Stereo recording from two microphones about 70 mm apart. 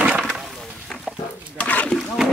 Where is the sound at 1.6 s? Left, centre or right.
Left.